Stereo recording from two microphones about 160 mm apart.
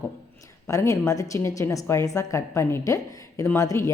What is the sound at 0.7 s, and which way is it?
A woman's voice, 20° left (ahead or behind).